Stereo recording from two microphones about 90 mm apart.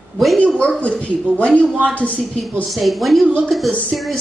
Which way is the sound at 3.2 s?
15° right (ahead or behind).